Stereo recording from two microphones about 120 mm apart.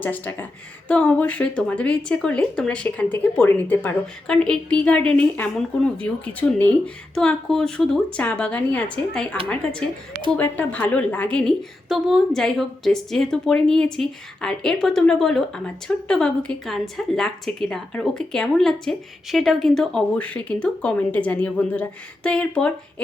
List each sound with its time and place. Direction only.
0.0 s speech: 15° left (ahead or behind)
11.9 s a woman's voice: 5° right (ahead or behind)